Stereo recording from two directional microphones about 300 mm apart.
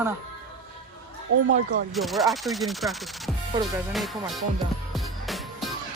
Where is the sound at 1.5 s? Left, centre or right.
Right.